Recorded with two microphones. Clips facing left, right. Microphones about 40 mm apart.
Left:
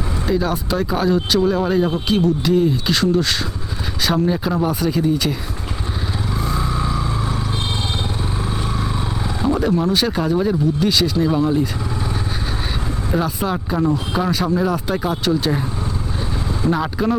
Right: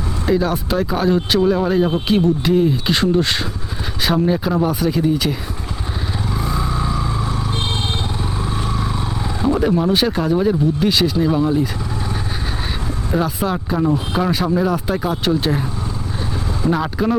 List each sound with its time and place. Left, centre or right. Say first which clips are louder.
0.3 s speech: right 2 dB; centre
1.0 s a man's voice: right 1 dB; centre
1.9 s a man's voice: right 1 dB; right
2.9 s speech: right 1 dB; right
4.1 s speech: right 2 dB; centre
6.3 s vehicle: even; centre
10.1 s a man's voice: right 1 dB; centre
11.3 s speech: right 1 dB; centre
13.1 s speech: right 1 dB; centre
16.6 s speech: right 1 dB; centre